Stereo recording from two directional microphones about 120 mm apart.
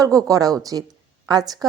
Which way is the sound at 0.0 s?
30° right (ahead or behind).